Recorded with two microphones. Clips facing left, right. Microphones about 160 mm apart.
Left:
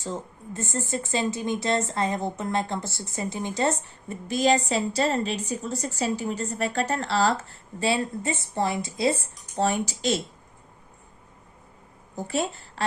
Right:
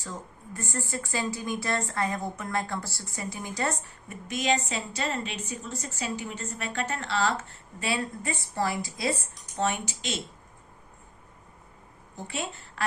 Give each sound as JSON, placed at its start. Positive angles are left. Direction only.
{"t": 0.0, "sound": "speech", "side_deg": 25}
{"t": 12.1, "sound": "a woman's voice", "side_deg": 40}